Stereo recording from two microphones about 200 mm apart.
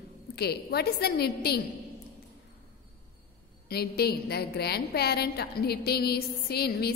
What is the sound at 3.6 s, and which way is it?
A woman's voice, 50° left (ahead or behind).